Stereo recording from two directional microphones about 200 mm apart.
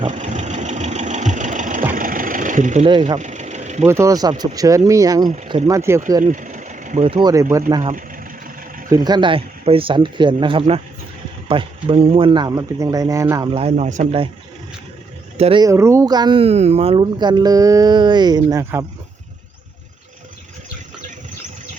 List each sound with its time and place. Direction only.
0.1 s vehicle: 40° right (ahead or behind)
3.8 s speech: 15° right (ahead or behind)
6.2 s speech: 40° right (ahead or behind); by 7.4 s 20° right (ahead or behind)
8.9 s speech: 20° right (ahead or behind)
13.5 s speech: 30° right (ahead or behind)
15.4 s speech: 30° right (ahead or behind)
15.6 s speech: 15° right (ahead or behind)